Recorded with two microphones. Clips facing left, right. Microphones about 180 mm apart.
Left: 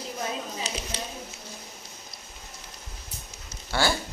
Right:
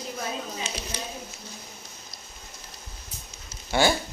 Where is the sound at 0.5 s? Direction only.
35° left (ahead or behind).